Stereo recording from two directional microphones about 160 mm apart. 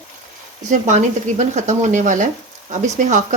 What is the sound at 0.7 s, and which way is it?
Speech, 50° right (ahead or behind).